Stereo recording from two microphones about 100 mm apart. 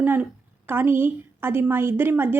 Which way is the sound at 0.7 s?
20° right (ahead or behind).